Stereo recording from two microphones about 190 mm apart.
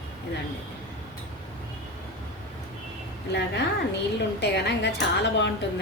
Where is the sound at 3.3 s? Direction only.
60° left (ahead or behind).